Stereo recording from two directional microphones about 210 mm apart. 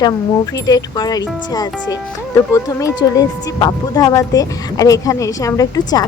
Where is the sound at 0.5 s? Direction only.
20° left (ahead or behind).